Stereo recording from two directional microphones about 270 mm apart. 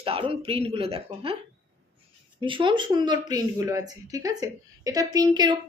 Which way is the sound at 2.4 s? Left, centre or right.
Centre.